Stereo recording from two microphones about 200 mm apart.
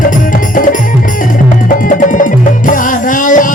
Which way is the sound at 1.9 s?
40° left (ahead or behind).